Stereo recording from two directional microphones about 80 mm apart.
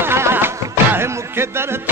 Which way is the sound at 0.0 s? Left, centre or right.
Right.